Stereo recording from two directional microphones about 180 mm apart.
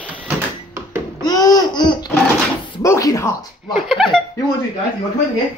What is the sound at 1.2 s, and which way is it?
Laughter, 20° left (ahead or behind).